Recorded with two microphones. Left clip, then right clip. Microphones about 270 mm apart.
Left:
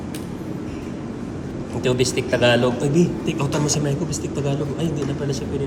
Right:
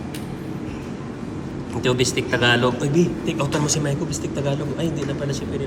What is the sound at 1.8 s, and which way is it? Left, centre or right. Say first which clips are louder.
A man's voice: even; centre.